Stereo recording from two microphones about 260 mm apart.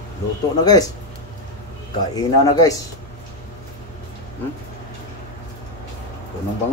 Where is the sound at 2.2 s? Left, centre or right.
Centre.